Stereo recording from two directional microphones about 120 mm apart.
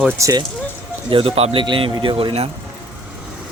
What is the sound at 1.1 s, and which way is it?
Speech, 50° right (ahead or behind).